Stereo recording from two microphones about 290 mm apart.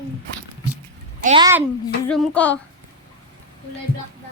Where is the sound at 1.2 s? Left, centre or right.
Right.